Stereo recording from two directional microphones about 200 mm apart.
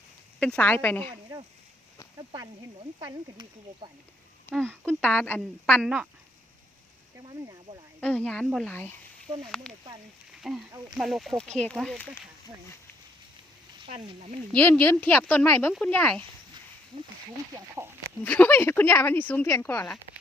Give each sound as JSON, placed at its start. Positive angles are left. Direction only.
{"t": 0.3, "sound": "speech", "side_deg": 5}
{"t": 2.1, "sound": "speech", "side_deg": -15}
{"t": 4.5, "sound": "a woman's voice", "side_deg": 5}
{"t": 7.3, "sound": "speech", "side_deg": -20}
{"t": 8.0, "sound": "a woman's voice", "side_deg": 5}
{"t": 10.7, "sound": "speech", "side_deg": -15}
{"t": 10.9, "sound": "a woman's voice", "side_deg": 0}
{"t": 13.8, "sound": "frying", "side_deg": -35}
{"t": 14.5, "sound": "speech", "side_deg": 5}
{"t": 18.2, "sound": "speech", "side_deg": 10}